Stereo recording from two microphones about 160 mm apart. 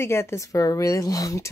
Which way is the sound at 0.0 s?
15° left (ahead or behind).